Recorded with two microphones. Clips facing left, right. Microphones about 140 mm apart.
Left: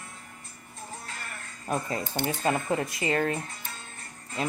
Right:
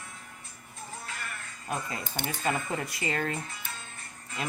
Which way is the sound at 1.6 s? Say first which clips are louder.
Left 5 dB; 40° left (ahead or behind).